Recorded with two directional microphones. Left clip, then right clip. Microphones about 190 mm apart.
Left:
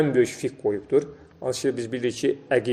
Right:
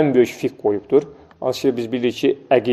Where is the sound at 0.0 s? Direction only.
20° right (ahead or behind).